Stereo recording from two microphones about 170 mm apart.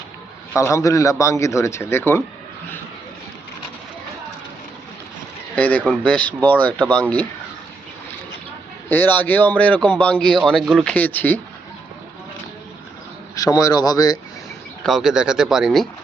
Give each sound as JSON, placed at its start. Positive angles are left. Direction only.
{"t": 0.5, "sound": "speech", "side_deg": 15}
{"t": 5.5, "sound": "speech", "side_deg": 10}
{"t": 8.9, "sound": "speech", "side_deg": 10}
{"t": 13.3, "sound": "speech", "side_deg": 20}
{"t": 14.8, "sound": "speech", "side_deg": 0}